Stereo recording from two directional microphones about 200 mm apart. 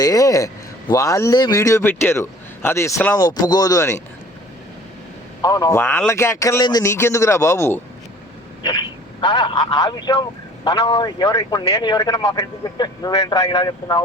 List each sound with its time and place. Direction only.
0.0 s speech: 15° left (ahead or behind)
5.4 s speech: 15° left (ahead or behind)